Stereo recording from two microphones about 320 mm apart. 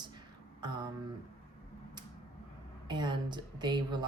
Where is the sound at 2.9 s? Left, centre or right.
Centre.